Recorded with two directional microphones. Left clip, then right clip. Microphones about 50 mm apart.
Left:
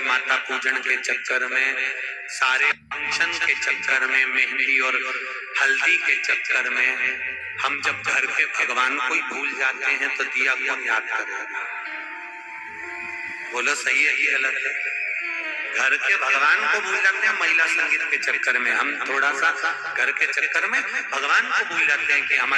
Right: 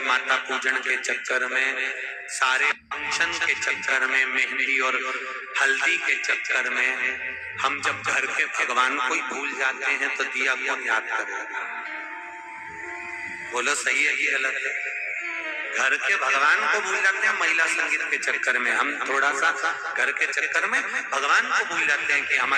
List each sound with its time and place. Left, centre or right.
0.0 s a man's voice: right
13.6 s a man's voice: right